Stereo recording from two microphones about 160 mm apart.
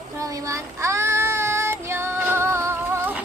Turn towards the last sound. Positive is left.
turn(degrees=-15)  # may be behind; listen again after turning